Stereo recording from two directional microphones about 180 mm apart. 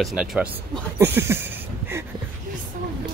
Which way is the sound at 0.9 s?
15° right (ahead or behind).